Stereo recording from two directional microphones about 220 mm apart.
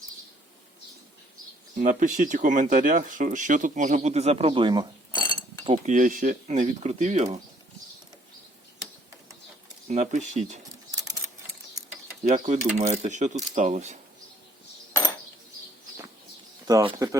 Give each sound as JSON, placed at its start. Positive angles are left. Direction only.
{"t": 1.7, "sound": "speech", "side_deg": -35}
{"t": 5.1, "sound": "chink", "side_deg": 20}
{"t": 5.6, "sound": "speech", "side_deg": -30}
{"t": 9.9, "sound": "speech", "side_deg": -30}
{"t": 12.7, "sound": "speech", "side_deg": -30}
{"t": 16.6, "sound": "speech", "side_deg": -15}